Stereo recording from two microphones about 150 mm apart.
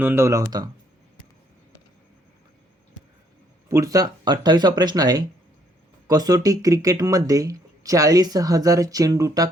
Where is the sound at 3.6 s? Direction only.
20° right (ahead or behind).